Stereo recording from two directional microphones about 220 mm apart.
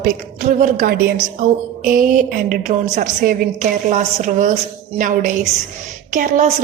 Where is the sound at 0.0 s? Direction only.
35° right (ahead or behind).